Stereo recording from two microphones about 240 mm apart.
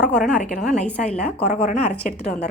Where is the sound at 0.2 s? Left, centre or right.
Left.